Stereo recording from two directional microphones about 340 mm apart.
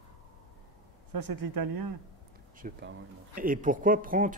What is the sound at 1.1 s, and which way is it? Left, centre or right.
Speech, right.